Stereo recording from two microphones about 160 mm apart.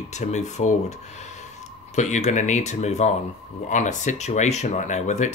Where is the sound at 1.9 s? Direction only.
45° left (ahead or behind).